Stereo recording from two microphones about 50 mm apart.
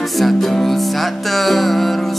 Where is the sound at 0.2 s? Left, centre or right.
Centre.